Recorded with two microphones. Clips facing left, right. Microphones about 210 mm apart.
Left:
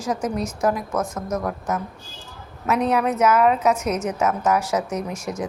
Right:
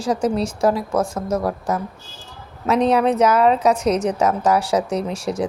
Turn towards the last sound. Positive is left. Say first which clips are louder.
# right 5 dB
turn(degrees=-30)  # may be behind; listen again after turning